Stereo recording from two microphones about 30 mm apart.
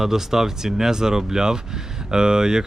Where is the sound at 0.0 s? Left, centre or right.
Centre.